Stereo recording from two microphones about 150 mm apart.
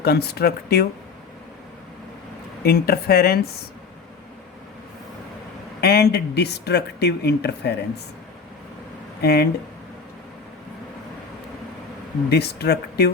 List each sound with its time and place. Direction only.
0.0 s speech: 90° left
2.6 s speech: 90° left
5.8 s speech: 90° left
9.2 s speech: 90° left
12.3 s speech: 90° left